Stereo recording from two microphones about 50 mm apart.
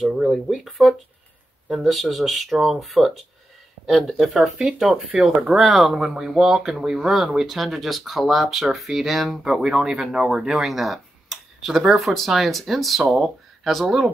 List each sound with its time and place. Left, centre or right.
0.3 s speech: centre
5.6 s speech: centre
9.4 s speech: centre
10.5 s speech: centre